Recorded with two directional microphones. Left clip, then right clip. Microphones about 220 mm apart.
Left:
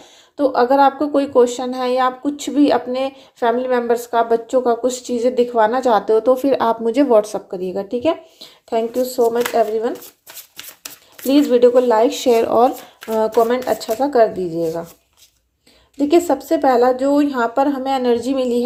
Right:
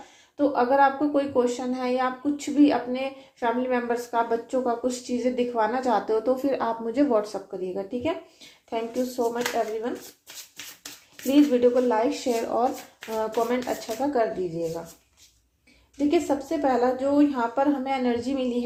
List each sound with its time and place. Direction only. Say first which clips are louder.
0.3 s a woman's voice: left 7 dB; 45° left (ahead or behind)
16.0 s speech: left 8 dB; 45° left (ahead or behind)